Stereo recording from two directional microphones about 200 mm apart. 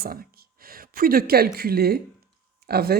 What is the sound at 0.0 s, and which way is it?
Speech, 50° right (ahead or behind).